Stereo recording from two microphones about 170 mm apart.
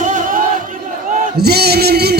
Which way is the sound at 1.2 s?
70° right (ahead or behind).